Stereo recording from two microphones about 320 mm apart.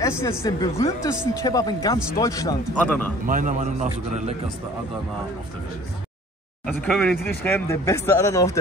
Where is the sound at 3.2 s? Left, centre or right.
Right.